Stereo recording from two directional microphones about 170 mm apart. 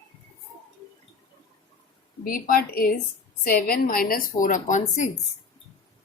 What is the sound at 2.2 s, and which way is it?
A woman's voice, 55° left (ahead or behind).